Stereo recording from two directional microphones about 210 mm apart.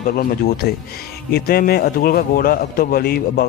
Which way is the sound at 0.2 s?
45° left (ahead or behind).